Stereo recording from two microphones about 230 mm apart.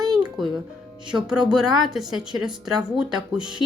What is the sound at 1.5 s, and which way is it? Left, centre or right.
Speech, centre.